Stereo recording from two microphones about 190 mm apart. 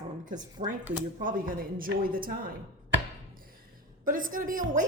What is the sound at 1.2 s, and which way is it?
A woman's voice, 45° right (ahead or behind).